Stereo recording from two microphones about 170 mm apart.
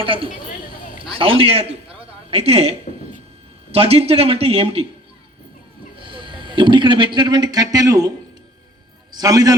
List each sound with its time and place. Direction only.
0.0 s speech: 30° right (ahead or behind)
6.0 s speech: 30° right (ahead or behind)
9.1 s a man's voice: 20° right (ahead or behind)